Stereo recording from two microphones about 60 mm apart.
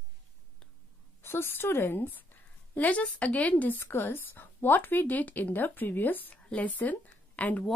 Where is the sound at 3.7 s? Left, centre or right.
Left.